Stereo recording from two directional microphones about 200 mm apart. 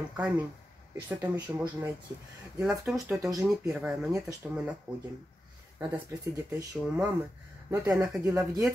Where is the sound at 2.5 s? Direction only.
5° right (ahead or behind).